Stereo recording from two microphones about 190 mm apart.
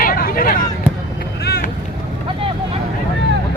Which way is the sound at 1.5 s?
55° left (ahead or behind).